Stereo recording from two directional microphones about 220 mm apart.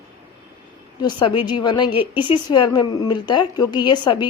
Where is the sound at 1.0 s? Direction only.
20° left (ahead or behind).